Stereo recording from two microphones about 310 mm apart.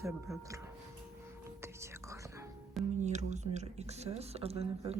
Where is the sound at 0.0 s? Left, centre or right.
Centre.